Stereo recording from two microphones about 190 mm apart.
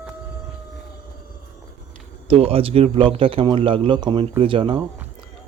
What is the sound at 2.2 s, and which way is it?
Speech, 30° right (ahead or behind).